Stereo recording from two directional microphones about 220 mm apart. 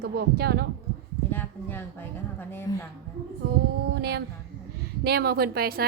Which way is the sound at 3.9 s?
50° right (ahead or behind).